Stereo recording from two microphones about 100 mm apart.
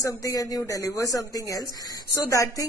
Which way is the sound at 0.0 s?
35° left (ahead or behind).